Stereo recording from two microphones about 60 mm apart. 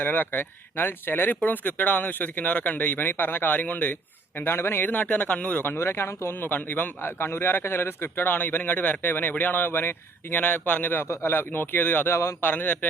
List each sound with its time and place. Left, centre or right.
0.0 s a man's voice: left
4.4 s speech: left
5.7 s speech: left
6.4 s a man's voice: left